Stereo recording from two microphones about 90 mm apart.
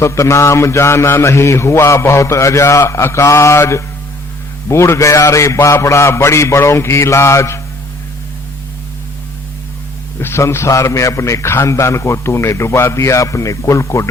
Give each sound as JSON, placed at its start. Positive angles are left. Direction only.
{"t": 0.0, "sound": "a man's voice", "side_deg": 30}
{"t": 10.2, "sound": "a man's voice", "side_deg": 30}